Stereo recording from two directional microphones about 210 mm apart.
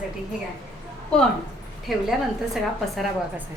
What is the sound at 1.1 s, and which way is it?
A woman's voice, 5° left (ahead or behind).